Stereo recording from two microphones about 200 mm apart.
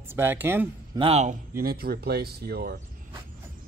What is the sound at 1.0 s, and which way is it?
Speech, 30° right (ahead or behind).